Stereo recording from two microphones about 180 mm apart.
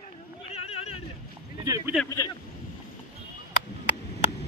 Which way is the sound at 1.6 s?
20° right (ahead or behind).